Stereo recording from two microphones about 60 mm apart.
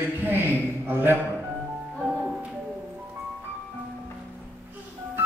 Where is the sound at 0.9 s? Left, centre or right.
Right.